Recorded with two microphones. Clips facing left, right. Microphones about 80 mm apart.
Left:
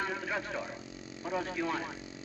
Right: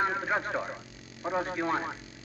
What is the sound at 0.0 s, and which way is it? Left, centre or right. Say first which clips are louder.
Speech: right 6 dB; right.